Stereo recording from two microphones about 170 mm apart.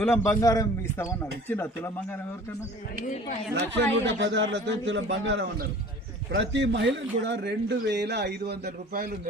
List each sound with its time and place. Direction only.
0.0 s a man's voice: 15° left (ahead or behind)
3.5 s a man's voice: 90° right; by 9.1 s 60° right (ahead or behind)